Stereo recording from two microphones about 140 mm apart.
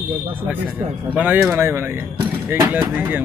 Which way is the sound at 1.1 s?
10° right (ahead or behind).